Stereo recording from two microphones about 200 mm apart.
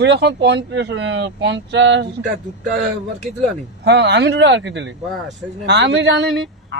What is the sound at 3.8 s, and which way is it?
Speech, 60° right (ahead or behind).